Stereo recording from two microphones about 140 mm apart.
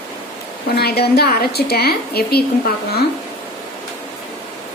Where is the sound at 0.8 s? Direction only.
90° left.